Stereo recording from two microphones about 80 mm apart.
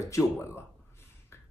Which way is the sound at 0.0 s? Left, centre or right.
Left.